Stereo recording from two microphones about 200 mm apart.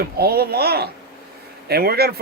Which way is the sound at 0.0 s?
50° right (ahead or behind).